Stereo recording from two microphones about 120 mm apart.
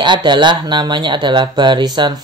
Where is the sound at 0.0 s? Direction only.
40° right (ahead or behind).